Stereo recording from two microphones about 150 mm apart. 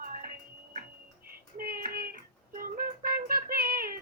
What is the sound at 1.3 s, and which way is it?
Music, 80° right.